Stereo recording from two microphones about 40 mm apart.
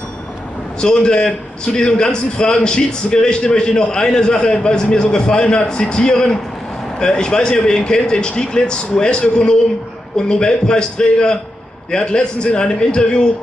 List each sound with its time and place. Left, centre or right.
0.7 s a man's voice: centre